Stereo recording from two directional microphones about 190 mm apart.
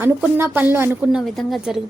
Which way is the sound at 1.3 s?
Centre (ahead or behind).